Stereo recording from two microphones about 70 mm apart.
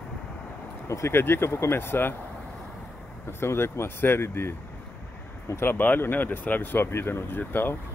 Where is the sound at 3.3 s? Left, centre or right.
Left.